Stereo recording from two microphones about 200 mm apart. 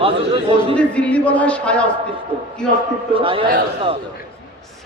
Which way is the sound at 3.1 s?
25° right (ahead or behind).